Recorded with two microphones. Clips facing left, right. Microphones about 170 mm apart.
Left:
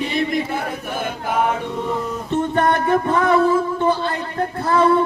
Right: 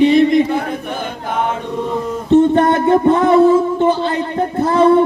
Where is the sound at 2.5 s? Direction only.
25° right (ahead or behind).